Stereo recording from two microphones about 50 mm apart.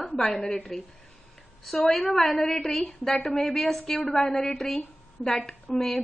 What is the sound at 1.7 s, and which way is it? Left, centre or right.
A woman's voice, centre.